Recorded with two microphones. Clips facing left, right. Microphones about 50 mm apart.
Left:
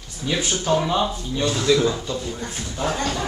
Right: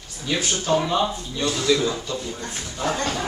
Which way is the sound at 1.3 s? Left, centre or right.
Left.